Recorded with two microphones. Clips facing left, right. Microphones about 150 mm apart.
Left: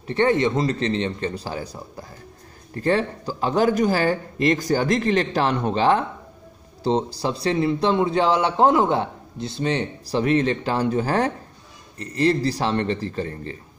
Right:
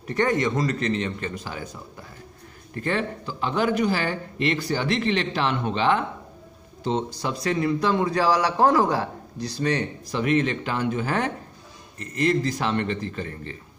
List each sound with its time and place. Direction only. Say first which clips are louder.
0.0 s a man's voice: left 3 dB; 25° left (ahead or behind)